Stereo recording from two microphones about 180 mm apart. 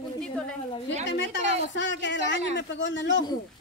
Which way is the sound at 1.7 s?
90° left.